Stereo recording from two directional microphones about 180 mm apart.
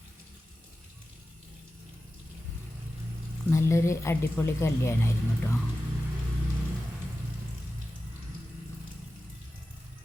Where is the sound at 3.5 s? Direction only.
15° left (ahead or behind).